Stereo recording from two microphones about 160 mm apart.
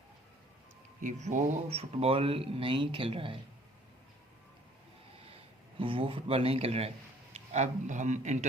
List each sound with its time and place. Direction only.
1.0 s speech: 50° right (ahead or behind); by 3.3 s 35° right (ahead or behind)
5.8 s a man's voice: 35° right (ahead or behind)